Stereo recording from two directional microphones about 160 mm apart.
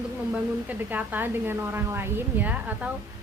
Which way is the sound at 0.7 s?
10° right (ahead or behind).